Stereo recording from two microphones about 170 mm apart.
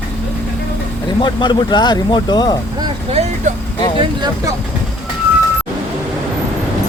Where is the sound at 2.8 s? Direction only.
35° right (ahead or behind).